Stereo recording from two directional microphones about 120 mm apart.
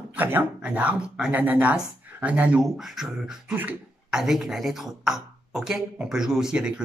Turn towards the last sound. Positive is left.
turn(degrees=-5)  # may be behind; listen again after turning